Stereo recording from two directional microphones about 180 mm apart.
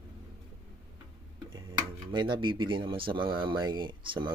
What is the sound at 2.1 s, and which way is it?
Speech, 25° right (ahead or behind).